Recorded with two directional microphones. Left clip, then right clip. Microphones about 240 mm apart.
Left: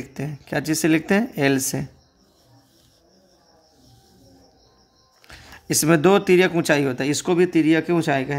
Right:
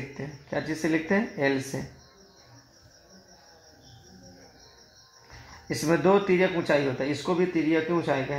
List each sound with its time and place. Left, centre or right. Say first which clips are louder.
0.2 s speech: left 6 dB; left
5.7 s speech: left 6 dB; left